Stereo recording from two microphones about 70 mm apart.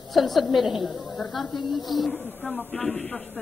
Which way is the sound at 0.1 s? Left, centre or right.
Centre.